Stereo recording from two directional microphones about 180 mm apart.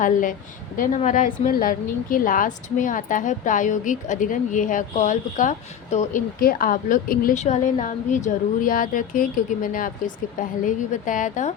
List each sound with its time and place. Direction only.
0.0 s a woman's voice: 50° left (ahead or behind)